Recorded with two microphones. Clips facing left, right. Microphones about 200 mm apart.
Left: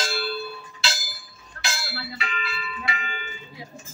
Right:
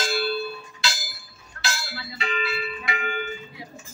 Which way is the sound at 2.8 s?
55° right (ahead or behind).